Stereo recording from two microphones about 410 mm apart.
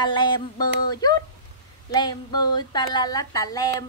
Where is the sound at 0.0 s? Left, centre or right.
Centre.